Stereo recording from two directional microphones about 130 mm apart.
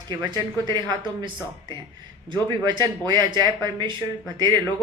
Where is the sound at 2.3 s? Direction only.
35° right (ahead or behind).